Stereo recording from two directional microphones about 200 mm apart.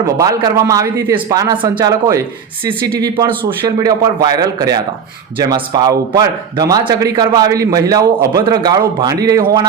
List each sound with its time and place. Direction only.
0.2 s a man's voice: 15° right (ahead or behind)